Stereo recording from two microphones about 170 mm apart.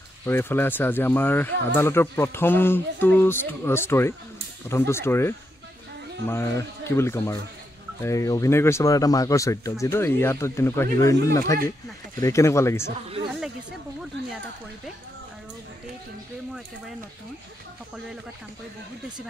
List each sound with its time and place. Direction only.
0.2 s speech: 15° left (ahead or behind)